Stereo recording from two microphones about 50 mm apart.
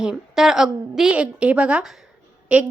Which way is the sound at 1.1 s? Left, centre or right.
Right.